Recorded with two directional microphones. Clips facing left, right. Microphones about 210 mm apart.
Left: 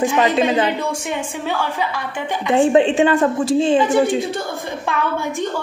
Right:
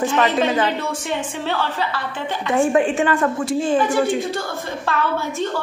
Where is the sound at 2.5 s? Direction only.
25° left (ahead or behind).